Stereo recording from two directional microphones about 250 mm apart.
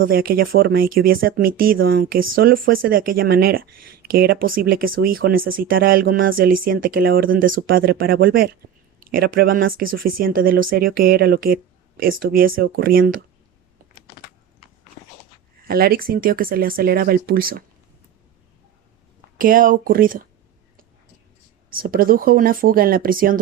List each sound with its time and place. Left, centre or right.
0.0 s speech: right
15.6 s speech: right
19.4 s speech: right
21.7 s speech: right